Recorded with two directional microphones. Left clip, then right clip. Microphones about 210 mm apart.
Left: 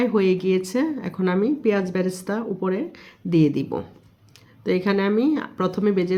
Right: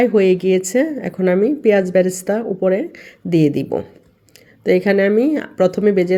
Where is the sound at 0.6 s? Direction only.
20° right (ahead or behind).